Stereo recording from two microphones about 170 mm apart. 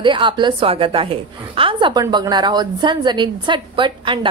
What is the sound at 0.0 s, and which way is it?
A woman's voice, 30° right (ahead or behind).